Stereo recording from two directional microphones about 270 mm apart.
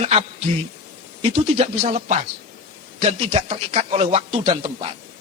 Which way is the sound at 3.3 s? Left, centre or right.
Right.